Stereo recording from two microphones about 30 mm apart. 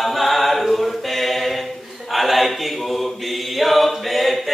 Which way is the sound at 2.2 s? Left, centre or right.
Centre.